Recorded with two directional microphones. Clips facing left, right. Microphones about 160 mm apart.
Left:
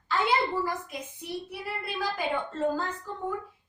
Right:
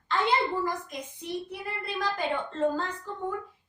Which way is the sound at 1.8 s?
10° left (ahead or behind).